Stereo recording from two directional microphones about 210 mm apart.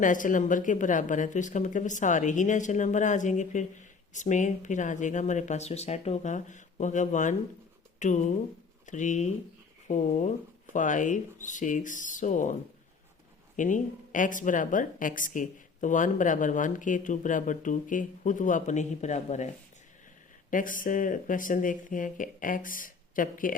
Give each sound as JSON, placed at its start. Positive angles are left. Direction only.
{"t": 0.0, "sound": "a woman's voice", "side_deg": 40}
{"t": 13.6, "sound": "a woman's voice", "side_deg": 40}
{"t": 20.5, "sound": "a woman's voice", "side_deg": 40}